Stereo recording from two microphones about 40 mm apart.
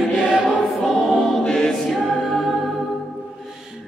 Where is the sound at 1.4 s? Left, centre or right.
Centre.